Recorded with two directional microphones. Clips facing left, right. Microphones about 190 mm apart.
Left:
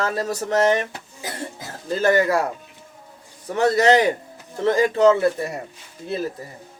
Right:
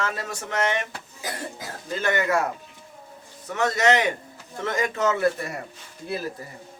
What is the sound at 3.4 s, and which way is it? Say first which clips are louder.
Speech: left 5 dB; 35° left (ahead or behind).